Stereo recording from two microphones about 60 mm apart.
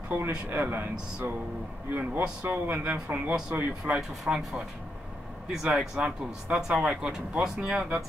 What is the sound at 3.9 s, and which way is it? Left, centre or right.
Speech, centre.